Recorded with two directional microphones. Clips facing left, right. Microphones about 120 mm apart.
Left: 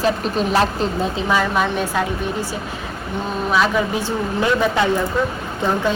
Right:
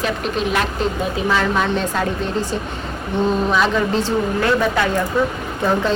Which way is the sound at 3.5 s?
5° left (ahead or behind).